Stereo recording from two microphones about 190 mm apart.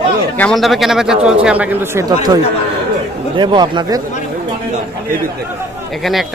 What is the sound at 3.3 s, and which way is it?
Speech, 25° right (ahead or behind).